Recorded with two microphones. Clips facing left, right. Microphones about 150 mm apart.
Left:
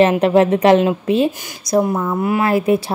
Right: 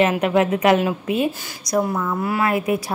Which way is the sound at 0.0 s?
30° left (ahead or behind).